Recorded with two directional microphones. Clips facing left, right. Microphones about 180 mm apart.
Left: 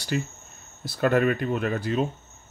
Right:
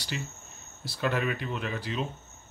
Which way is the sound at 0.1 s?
45° left (ahead or behind).